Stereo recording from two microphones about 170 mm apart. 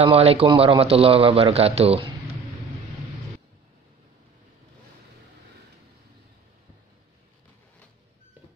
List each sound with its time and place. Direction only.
0.0 s speech: 35° right (ahead or behind)